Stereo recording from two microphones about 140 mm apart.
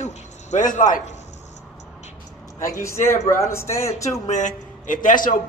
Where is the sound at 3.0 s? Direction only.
20° left (ahead or behind).